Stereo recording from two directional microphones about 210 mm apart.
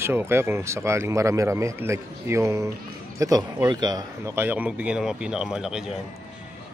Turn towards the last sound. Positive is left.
turn(degrees=-5)  # may be behind; listen again after turning